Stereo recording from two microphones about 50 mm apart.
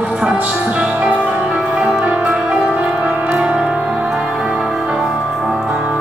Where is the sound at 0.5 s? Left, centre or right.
Right.